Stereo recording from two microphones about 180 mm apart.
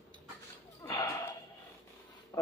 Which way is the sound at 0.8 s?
20° left (ahead or behind).